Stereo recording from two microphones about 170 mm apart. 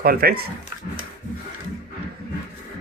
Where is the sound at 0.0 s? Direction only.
65° right (ahead or behind).